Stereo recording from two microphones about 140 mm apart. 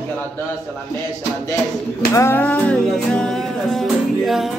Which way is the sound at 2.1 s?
20° left (ahead or behind).